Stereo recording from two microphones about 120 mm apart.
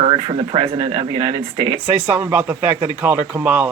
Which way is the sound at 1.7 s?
10° right (ahead or behind).